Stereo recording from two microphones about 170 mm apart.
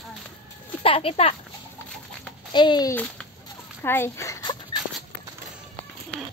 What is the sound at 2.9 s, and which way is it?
Speech, 10° left (ahead or behind).